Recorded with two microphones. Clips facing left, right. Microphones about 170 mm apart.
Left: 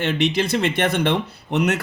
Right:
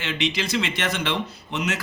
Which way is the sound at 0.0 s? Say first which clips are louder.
Left 6 dB; 55° left (ahead or behind).